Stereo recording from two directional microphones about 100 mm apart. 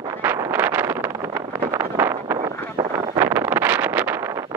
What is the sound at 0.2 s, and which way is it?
Wind noise, 20° right (ahead or behind).